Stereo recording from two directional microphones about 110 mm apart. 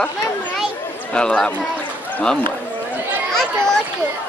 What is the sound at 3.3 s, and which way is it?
Children playing, 5° left (ahead or behind).